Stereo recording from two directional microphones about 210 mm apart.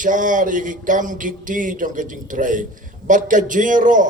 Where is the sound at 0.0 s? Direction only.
40° right (ahead or behind).